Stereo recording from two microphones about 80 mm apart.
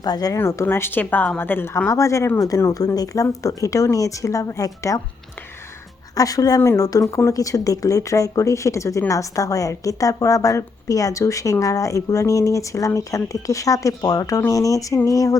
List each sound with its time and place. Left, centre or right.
0.0 s speech: left
0.3 s speech: left
1.9 s speech: left
6.1 s speech: left